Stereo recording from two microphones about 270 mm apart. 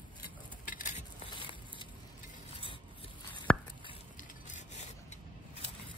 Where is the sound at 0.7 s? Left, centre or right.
Left.